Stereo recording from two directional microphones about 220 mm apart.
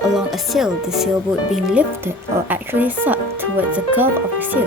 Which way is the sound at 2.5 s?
10° right (ahead or behind).